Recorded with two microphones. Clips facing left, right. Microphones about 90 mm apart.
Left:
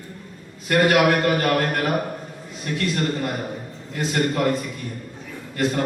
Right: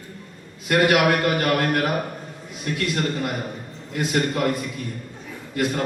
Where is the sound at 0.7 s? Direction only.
5° right (ahead or behind).